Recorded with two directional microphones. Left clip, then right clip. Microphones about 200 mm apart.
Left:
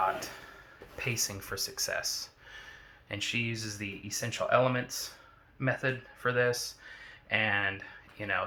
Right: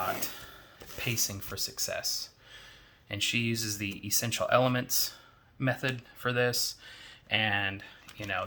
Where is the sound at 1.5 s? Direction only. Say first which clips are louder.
Left 4 dB; 45° right (ahead or behind).